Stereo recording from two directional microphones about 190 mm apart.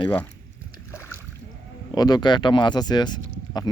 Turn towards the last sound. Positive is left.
turn(degrees=20)  # may be behind; listen again after turning